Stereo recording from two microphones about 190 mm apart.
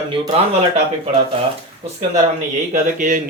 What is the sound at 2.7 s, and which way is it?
Speech, 45° right (ahead or behind).